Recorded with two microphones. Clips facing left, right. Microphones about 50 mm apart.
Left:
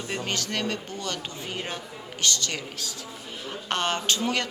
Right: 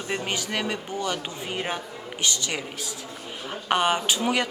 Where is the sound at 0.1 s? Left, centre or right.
Centre.